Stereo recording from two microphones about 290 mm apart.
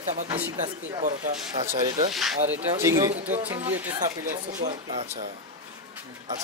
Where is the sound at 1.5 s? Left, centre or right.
Right.